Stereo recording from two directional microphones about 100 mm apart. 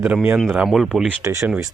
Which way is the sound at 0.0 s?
20° right (ahead or behind).